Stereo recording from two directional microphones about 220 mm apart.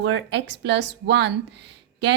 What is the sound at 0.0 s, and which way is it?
Speech, 55° right (ahead or behind).